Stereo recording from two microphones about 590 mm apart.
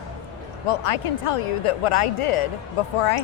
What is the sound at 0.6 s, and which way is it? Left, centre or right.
A woman's voice, left.